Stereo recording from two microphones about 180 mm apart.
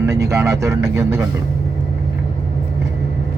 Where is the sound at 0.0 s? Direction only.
15° right (ahead or behind).